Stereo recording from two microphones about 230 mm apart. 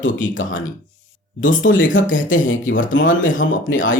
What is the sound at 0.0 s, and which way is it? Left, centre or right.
Speech, left.